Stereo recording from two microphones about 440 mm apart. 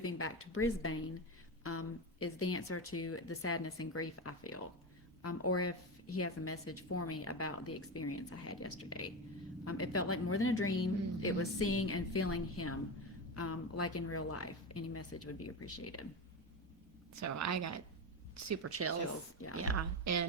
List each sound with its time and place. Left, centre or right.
0.0 s a woman's voice: left
17.2 s a woman's voice: right